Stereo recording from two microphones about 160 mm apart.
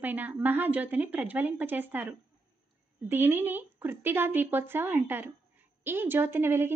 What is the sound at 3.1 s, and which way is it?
A woman's voice, 15° right (ahead or behind).